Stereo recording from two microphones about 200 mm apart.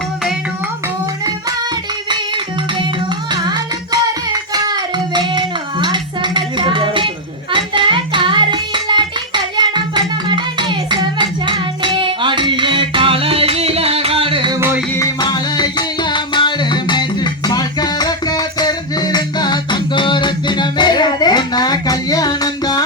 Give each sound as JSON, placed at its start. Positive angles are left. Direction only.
{"t": 2.0, "sound": "music", "side_deg": -25}
{"t": 7.5, "sound": "child singing", "side_deg": -25}
{"t": 14.6, "sound": "music", "side_deg": -10}
{"t": 14.9, "sound": "music", "side_deg": 20}